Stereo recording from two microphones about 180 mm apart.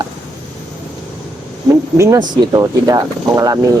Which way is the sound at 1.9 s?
15° right (ahead or behind).